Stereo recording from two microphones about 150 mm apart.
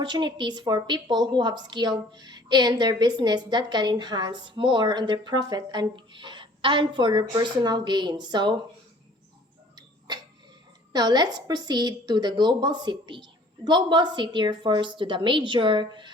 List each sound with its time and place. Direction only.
0.0 s a woman's voice: 30° right (ahead or behind)
10.9 s a woman's voice: 30° right (ahead or behind)